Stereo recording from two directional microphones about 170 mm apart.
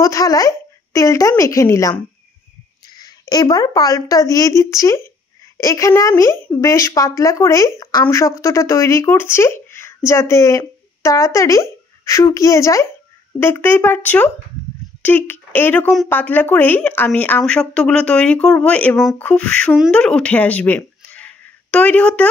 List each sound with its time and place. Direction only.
0.0 s speech: 20° left (ahead or behind)
3.0 s speech: 25° left (ahead or behind); by 22.3 s 5° left (ahead or behind)